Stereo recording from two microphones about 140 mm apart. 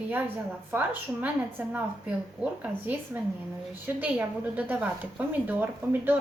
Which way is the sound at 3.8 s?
10° right (ahead or behind).